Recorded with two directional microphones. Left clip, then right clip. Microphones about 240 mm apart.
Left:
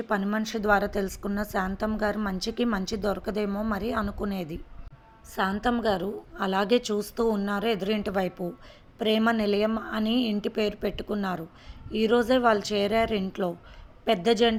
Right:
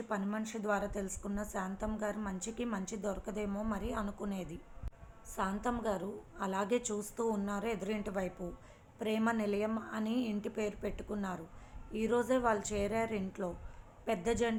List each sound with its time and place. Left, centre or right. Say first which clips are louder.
0.1 s a woman's voice: left 11 dB; left